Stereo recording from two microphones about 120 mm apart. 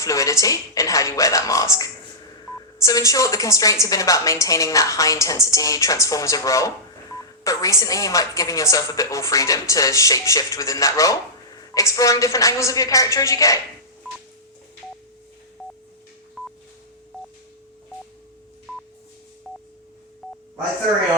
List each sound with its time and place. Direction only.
0.0 s a woman's voice: 25° left (ahead or behind)
15.6 s telephone dialing: centre (ahead or behind)
20.2 s telephone dialing: centre (ahead or behind)